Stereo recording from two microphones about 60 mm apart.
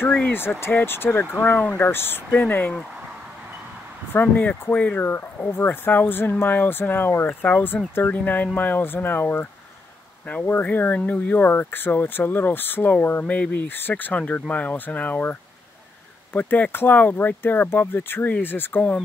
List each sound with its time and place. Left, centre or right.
0.0 s speech: left
4.1 s speech: left
5.5 s speech: left
10.3 s speech: left
16.3 s speech: left